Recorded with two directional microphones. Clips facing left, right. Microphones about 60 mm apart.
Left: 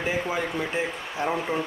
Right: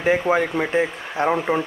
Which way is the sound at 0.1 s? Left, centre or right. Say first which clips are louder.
Right 12 dB; right.